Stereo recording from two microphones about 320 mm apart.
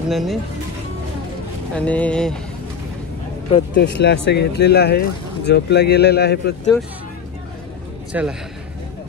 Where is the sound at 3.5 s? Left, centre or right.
Left.